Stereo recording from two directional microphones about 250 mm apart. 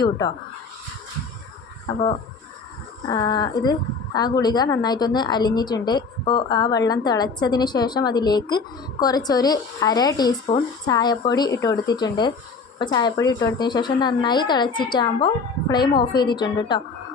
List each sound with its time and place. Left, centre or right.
3.1 s a woman's voice: centre